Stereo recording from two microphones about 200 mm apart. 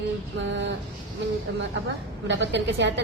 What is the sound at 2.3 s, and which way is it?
Speech, 60° right (ahead or behind).